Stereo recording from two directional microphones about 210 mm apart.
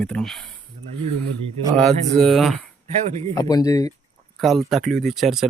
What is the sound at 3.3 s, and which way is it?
Speech, 15° left (ahead or behind).